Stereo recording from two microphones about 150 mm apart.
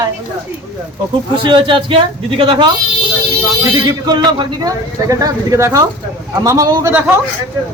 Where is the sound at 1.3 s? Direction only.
35° right (ahead or behind).